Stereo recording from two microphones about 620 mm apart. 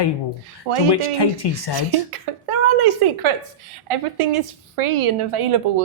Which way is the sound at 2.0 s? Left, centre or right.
Right.